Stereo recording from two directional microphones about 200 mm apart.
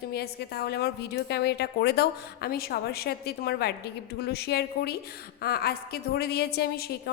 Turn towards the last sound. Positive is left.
turn(degrees=50)  # may be behind; listen again after turning